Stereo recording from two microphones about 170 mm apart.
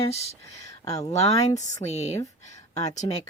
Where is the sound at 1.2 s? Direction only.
40° left (ahead or behind).